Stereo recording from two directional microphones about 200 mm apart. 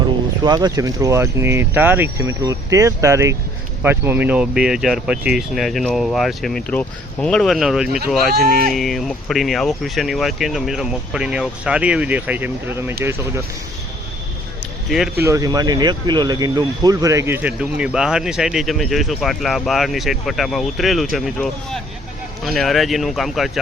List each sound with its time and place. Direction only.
0.4 s speech: 20° right (ahead or behind); by 8.4 s centre (ahead or behind)
8.4 s speech: 50° right (ahead or behind)
8.7 s speech: centre (ahead or behind)
14.8 s speech: centre (ahead or behind)
15.2 s speech: 15° right (ahead or behind); by 23.5 s centre (ahead or behind)